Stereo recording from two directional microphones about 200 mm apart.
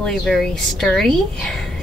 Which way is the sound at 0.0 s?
Centre (ahead or behind).